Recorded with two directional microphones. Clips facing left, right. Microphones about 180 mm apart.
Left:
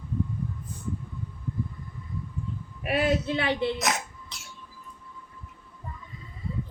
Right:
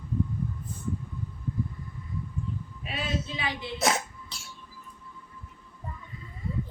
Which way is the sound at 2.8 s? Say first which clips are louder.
Left 9 dB; 65° left (ahead or behind).